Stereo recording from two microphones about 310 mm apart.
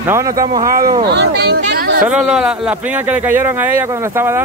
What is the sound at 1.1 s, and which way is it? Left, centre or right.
Speech, right.